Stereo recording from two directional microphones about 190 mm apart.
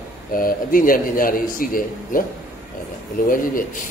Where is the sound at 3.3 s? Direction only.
45° left (ahead or behind).